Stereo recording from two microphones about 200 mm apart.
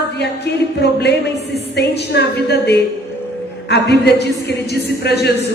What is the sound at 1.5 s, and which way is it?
Speech, 55° left (ahead or behind).